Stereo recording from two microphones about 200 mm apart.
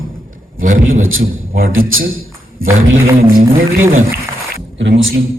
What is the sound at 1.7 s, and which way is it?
A man's voice, 90° right.